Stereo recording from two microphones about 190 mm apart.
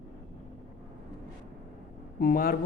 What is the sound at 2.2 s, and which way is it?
Speech, 50° left (ahead or behind).